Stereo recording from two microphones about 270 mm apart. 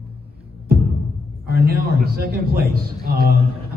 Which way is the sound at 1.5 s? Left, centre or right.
Right.